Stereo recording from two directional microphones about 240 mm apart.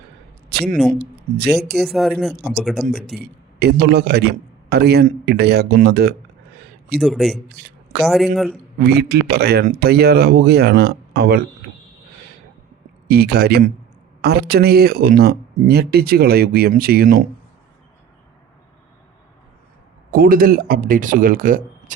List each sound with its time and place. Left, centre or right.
0.5 s speech: right
1.8 s speech: centre
3.2 s a man's voice: right
7.0 s speech: centre
7.5 s a sound: right
8.0 s speech: centre
8.8 s speech: right
13.1 s speech: right
20.1 s speech: right